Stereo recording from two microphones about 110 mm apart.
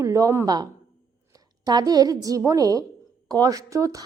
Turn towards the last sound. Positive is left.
turn(degrees=-30)  # may be behind; listen again after turning